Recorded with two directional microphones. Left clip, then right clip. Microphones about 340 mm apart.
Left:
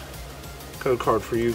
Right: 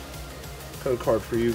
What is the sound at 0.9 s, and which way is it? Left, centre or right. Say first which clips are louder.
Speech: left 1 dB; centre.